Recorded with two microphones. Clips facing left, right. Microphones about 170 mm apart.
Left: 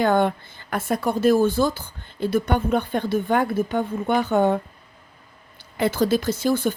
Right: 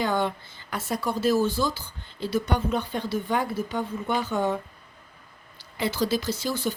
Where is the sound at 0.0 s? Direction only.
55° left (ahead or behind).